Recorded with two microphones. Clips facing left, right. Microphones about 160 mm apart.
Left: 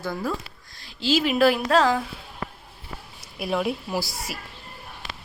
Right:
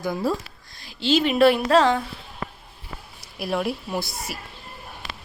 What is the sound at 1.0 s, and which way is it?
Speech, 5° left (ahead or behind).